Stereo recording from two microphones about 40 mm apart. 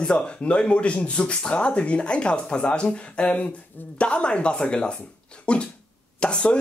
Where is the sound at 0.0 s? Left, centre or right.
Left.